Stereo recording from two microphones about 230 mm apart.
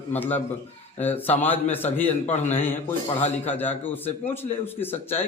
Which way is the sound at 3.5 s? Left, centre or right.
Centre.